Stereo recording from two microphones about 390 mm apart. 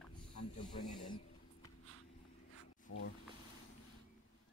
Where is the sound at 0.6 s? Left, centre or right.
Centre.